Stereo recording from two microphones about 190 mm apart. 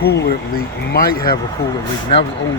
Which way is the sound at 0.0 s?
55° left (ahead or behind).